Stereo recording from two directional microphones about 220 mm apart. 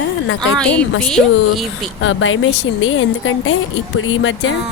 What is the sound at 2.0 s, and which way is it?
Speech, 65° left (ahead or behind).